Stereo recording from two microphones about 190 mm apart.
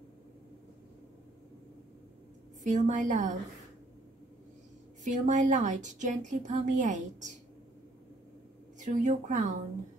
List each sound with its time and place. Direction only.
2.6 s a woman's voice: 40° right (ahead or behind)
5.0 s a woman's voice: 40° right (ahead or behind)
8.7 s speech: 40° right (ahead or behind)